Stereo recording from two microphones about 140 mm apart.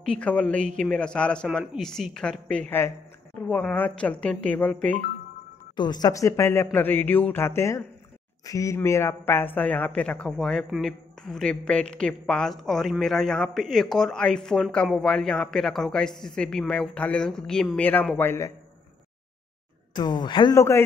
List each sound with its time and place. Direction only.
0.0 s a woman's voice: 5° left (ahead or behind)
5.8 s a woman's voice: 30° left (ahead or behind)
19.9 s speech: 30° left (ahead or behind)